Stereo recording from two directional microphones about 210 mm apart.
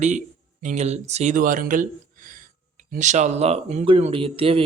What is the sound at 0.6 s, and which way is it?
Speech, 35° right (ahead or behind).